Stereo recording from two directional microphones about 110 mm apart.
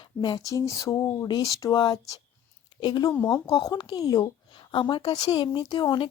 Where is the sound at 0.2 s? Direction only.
40° left (ahead or behind).